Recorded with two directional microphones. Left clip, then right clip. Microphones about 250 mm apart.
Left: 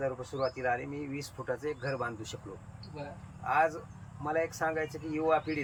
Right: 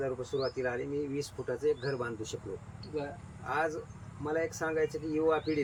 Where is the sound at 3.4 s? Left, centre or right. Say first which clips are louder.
Left 4 dB; centre.